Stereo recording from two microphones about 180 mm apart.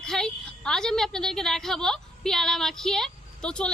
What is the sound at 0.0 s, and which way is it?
A woman's voice, 5° left (ahead or behind).